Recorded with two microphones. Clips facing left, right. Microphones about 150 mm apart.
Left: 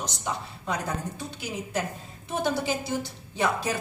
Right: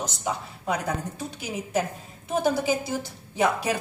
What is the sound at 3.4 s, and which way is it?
Speech, 10° right (ahead or behind).